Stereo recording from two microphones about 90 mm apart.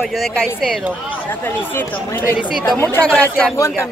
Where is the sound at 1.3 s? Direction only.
25° left (ahead or behind).